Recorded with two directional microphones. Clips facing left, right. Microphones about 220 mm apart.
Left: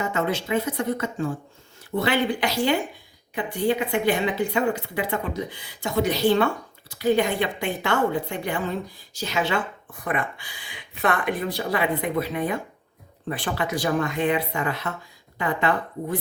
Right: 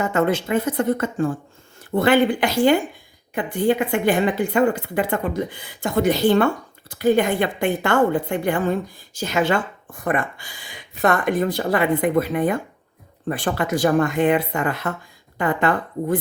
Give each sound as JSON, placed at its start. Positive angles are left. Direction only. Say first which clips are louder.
{"t": 0.0, "sound": "a woman's voice", "louder": "right 5 dB", "side_deg": -50}